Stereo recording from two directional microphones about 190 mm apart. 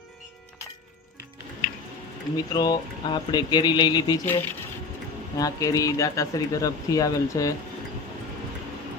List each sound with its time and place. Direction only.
2.3 s speech: 20° left (ahead or behind)
5.4 s speech: 20° left (ahead or behind)